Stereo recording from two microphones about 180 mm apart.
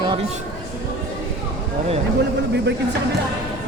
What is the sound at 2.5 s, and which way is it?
Speech, 70° right (ahead or behind).